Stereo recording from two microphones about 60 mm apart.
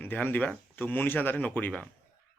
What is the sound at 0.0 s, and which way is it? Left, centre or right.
Speech, left.